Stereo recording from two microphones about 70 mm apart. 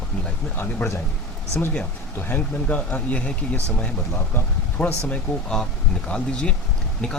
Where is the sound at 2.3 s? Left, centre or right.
Left.